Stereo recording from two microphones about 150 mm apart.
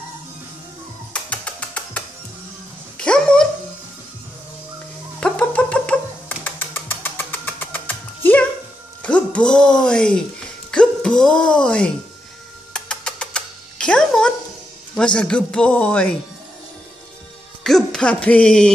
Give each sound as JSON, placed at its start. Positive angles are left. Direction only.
{"t": 1.1, "sound": "music", "side_deg": 10}
{"t": 3.0, "sound": "dog", "side_deg": 5}
{"t": 5.2, "sound": "music", "side_deg": 10}
{"t": 10.7, "sound": "a sound", "side_deg": 5}
{"t": 12.7, "sound": "music", "side_deg": 5}
{"t": 15.0, "sound": "a man's voice", "side_deg": 5}
{"t": 17.6, "sound": "speech", "side_deg": 5}